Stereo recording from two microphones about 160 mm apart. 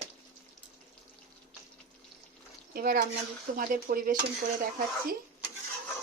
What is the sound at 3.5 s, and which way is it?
Speech, 60° right (ahead or behind).